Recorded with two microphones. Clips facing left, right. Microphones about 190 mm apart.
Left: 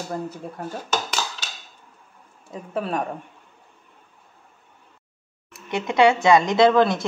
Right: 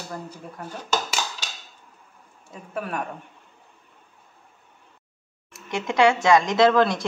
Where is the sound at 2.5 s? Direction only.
30° left (ahead or behind).